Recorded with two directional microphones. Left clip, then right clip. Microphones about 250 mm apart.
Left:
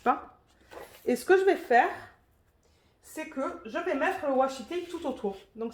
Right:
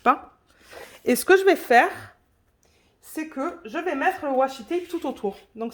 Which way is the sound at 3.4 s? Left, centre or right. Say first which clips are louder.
Right 3 dB; right.